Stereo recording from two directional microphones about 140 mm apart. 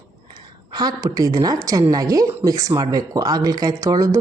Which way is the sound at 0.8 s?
25° right (ahead or behind).